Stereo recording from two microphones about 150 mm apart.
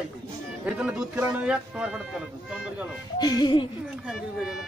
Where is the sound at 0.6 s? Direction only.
10° right (ahead or behind).